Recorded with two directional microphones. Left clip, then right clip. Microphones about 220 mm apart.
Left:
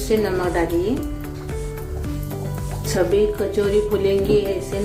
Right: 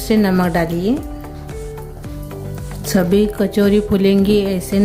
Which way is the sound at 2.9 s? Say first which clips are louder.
Right 2 dB; 50° right (ahead or behind).